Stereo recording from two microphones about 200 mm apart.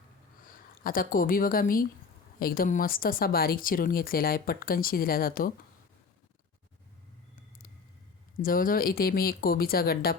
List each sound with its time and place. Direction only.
0.9 s speech: 45° left (ahead or behind)
8.4 s speech: 45° left (ahead or behind)